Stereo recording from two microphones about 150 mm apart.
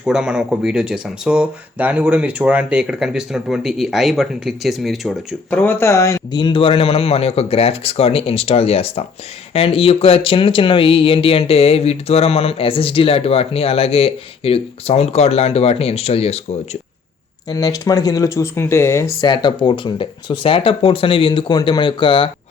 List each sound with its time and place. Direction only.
0.0 s speech: 5° right (ahead or behind)
5.5 s speech: 15° left (ahead or behind); by 16.4 s 45° left (ahead or behind)
17.5 s speech: 25° left (ahead or behind)
19.3 s speech: 30° left (ahead or behind)